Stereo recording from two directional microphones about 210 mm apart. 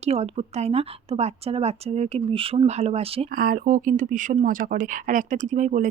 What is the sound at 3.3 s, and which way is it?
Speech, 45° right (ahead or behind).